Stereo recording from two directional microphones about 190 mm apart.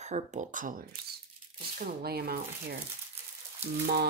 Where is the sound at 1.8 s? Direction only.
55° right (ahead or behind).